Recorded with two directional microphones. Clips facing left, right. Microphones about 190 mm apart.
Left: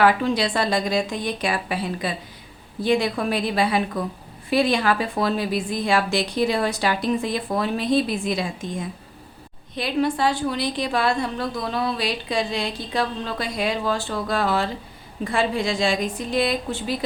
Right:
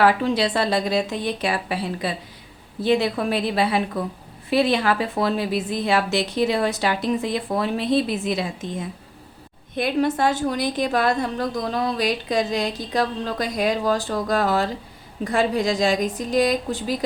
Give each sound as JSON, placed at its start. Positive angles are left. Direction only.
{"t": 0.0, "sound": "a woman's voice", "side_deg": -30}
{"t": 9.7, "sound": "a woman's voice", "side_deg": -50}